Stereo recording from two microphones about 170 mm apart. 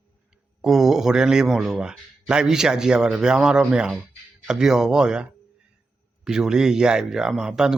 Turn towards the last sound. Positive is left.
turn(degrees=-5)  # may be behind; listen again after turning